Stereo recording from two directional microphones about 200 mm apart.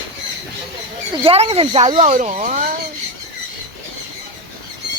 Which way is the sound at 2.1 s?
35° right (ahead or behind).